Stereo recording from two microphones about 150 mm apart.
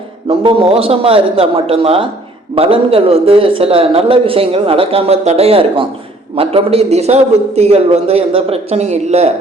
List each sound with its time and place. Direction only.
0.3 s a man's voice: 40° right (ahead or behind)